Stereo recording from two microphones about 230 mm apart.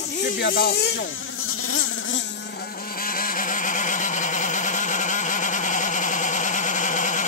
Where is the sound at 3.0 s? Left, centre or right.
Left.